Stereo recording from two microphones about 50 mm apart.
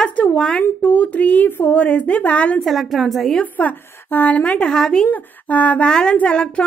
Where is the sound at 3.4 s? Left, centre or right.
Left.